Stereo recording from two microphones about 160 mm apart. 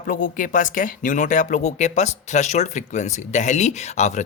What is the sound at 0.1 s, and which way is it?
Speech, 55° left (ahead or behind).